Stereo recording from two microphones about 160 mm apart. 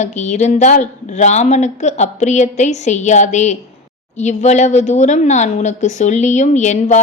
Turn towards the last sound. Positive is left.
turn(degrees=45)  # may be behind; listen again after turning